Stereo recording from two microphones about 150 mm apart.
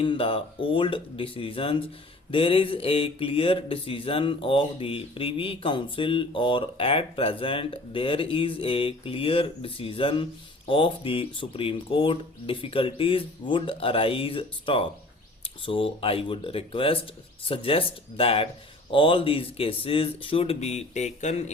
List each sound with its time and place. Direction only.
0.0 s speech: 35° left (ahead or behind)